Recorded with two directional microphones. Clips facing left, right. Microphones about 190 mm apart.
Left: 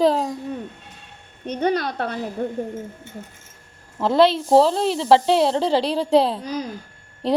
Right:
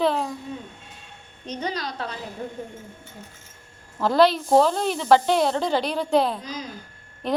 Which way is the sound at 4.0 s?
25° left (ahead or behind).